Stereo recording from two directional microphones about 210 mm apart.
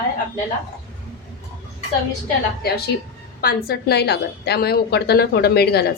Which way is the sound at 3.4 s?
45° left (ahead or behind).